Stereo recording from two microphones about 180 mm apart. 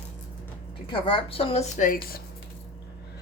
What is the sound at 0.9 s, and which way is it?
A woman's voice, 30° left (ahead or behind).